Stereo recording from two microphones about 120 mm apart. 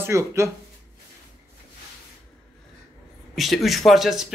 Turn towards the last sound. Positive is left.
turn(degrees=0)  # may be behind; listen again after turning